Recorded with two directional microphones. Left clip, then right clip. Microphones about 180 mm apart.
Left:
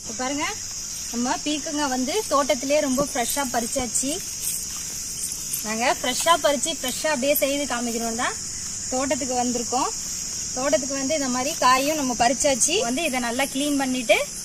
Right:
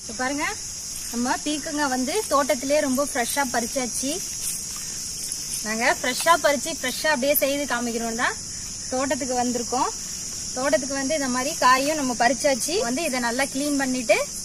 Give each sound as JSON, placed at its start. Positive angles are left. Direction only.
{"t": 0.2, "sound": "speech", "side_deg": 0}
{"t": 5.6, "sound": "speech", "side_deg": -5}